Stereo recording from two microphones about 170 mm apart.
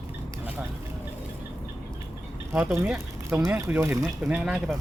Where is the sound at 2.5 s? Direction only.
15° right (ahead or behind).